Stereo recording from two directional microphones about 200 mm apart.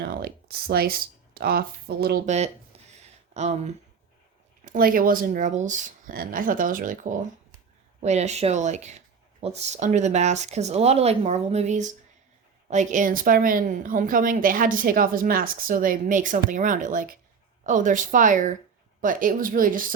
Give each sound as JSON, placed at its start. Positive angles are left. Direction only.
{"t": 0.0, "sound": "a woman's voice", "side_deg": -50}
{"t": 3.3, "sound": "a woman's voice", "side_deg": -35}